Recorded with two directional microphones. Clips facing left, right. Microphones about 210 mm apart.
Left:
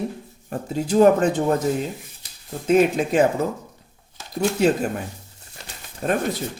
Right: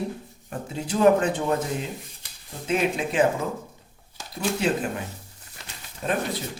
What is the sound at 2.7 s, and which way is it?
Speech, 45° left (ahead or behind).